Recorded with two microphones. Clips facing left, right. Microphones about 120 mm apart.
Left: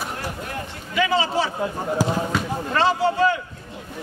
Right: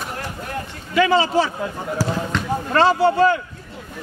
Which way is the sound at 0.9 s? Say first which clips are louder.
Right 5 dB; 50° right (ahead or behind).